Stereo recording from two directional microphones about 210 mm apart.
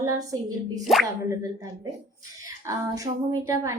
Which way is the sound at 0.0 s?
15° right (ahead or behind).